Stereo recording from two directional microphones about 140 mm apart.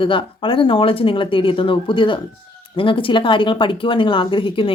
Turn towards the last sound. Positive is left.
turn(degrees=40)  # may be behind; listen again after turning